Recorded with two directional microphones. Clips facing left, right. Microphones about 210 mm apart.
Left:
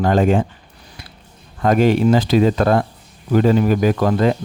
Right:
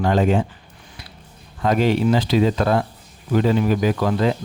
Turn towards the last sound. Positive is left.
turn(degrees=50)  # may be behind; listen again after turning